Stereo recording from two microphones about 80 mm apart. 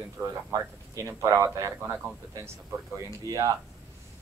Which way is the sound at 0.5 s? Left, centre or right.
Right.